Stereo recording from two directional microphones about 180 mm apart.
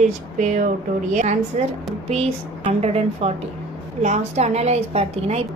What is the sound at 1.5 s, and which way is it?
A woman's voice, 40° right (ahead or behind).